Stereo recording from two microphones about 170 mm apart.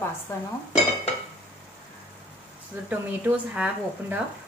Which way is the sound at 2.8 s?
10° right (ahead or behind).